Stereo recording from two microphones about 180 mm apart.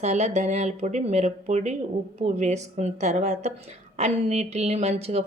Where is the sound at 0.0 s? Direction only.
40° right (ahead or behind).